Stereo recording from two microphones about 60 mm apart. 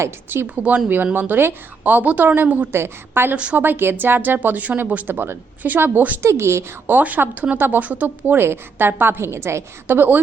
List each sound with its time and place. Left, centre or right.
0.4 s speech: right
2.7 s speech: right
3.3 s speech: centre
3.6 s speech: right
6.2 s a woman's voice: right
6.8 s speech: right
8.4 s a woman's voice: right
9.8 s speech: right